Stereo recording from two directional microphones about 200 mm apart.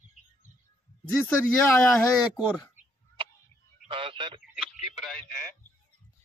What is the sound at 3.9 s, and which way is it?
Speech, 25° right (ahead or behind).